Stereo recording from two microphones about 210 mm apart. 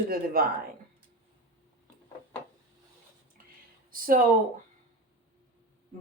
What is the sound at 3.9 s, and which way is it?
Speech, 40° right (ahead or behind).